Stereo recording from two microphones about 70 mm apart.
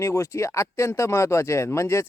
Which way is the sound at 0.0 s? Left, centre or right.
Left.